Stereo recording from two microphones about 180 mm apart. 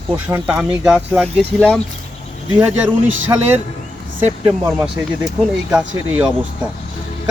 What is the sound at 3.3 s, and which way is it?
Speech, 20° right (ahead or behind).